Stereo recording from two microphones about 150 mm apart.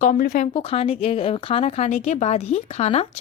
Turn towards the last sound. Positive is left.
turn(degrees=45)  # may be behind; listen again after turning